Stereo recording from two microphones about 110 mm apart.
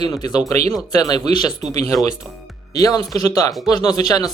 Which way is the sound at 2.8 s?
35° left (ahead or behind).